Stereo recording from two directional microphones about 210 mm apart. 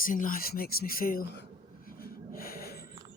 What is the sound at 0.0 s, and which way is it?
Speech, 40° left (ahead or behind).